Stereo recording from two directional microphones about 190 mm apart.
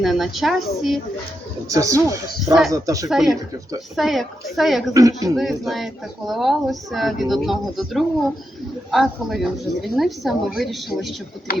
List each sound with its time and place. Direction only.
0.0 s speech: centre (ahead or behind)
1.7 s speech: 15° right (ahead or behind)
3.1 s speech: centre (ahead or behind)
4.9 s speech: 20° right (ahead or behind)
5.4 s speech: centre (ahead or behind)